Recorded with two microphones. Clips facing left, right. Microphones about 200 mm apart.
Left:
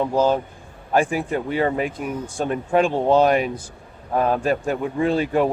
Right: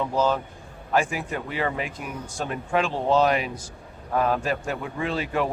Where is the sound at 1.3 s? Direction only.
35° left (ahead or behind).